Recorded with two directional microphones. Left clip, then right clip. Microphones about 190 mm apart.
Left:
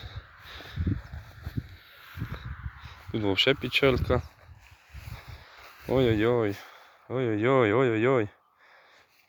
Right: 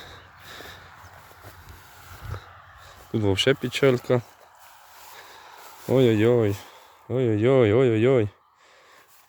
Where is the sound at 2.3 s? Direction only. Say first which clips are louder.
Right 3 dB; 20° right (ahead or behind).